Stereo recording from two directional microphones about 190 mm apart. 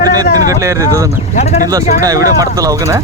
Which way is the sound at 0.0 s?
20° right (ahead or behind).